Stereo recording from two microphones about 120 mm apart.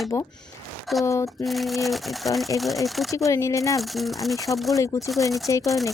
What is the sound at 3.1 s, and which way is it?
Speech, 25° left (ahead or behind).